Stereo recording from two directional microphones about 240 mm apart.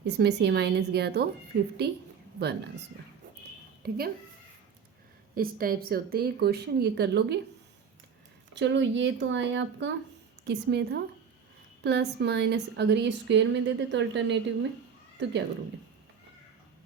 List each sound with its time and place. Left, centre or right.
0.0 s a woman's voice: right
3.8 s speech: right
5.3 s speech: right
8.5 s a woman's voice: right